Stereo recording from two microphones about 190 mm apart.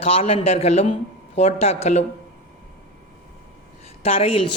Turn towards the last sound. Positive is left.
turn(degrees=30)  # may be behind; listen again after turning